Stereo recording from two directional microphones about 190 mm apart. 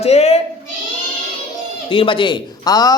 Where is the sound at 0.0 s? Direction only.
35° left (ahead or behind).